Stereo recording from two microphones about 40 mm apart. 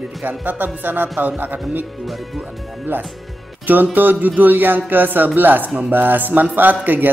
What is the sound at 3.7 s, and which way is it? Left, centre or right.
Speech, right.